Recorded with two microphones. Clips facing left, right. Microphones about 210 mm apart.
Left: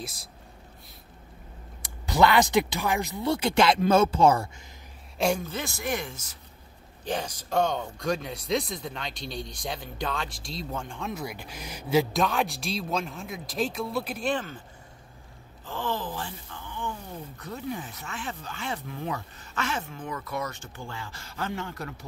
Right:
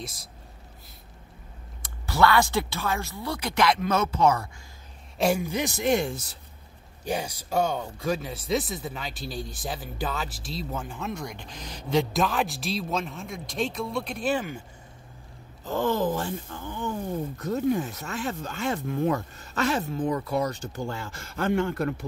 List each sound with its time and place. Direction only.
0.0 s speech: centre (ahead or behind)
1.8 s speech: 20° left (ahead or behind)
5.2 s speech: 10° right (ahead or behind); by 6.3 s 30° right (ahead or behind)
7.1 s speech: 10° right (ahead or behind)
14.3 s speech: 15° right (ahead or behind)
15.6 s speech: 45° right (ahead or behind)